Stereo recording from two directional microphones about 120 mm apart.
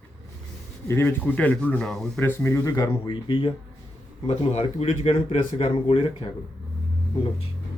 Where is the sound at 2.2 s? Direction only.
20° left (ahead or behind).